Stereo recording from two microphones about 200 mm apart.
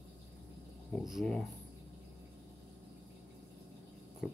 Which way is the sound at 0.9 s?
Centre (ahead or behind).